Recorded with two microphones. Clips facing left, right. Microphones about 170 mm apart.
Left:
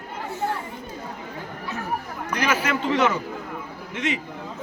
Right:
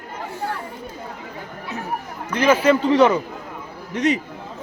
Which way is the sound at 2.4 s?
30° right (ahead or behind).